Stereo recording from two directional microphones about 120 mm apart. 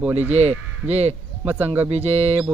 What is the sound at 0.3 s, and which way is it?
Speech, 60° right (ahead or behind).